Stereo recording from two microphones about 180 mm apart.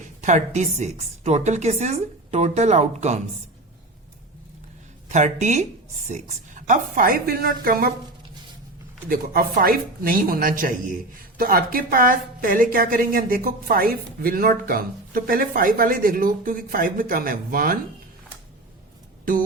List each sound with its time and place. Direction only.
0.2 s a woman's voice: 45° right (ahead or behind)
5.0 s a woman's voice: 40° right (ahead or behind)
9.0 s a woman's voice: 55° right (ahead or behind)
19.2 s speech: 50° right (ahead or behind)